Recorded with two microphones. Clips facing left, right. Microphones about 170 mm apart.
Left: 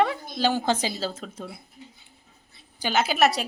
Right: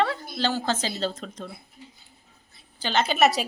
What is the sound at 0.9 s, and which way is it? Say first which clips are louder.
Speech: right 2 dB; 5° left (ahead or behind).